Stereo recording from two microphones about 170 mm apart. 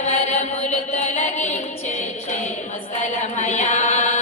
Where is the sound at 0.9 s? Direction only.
45° left (ahead or behind).